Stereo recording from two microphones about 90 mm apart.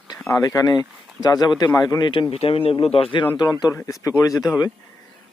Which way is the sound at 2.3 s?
90° left.